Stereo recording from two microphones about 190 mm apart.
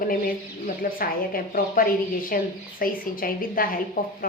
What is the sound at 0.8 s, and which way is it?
A woman's voice, 50° left (ahead or behind).